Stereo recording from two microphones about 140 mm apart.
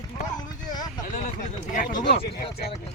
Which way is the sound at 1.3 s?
65° left (ahead or behind).